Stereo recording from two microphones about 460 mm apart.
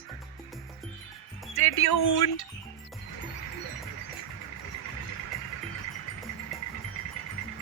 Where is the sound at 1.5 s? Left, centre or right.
Left.